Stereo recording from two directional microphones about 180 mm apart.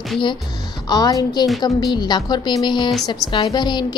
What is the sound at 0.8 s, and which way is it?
Speech, 20° left (ahead or behind).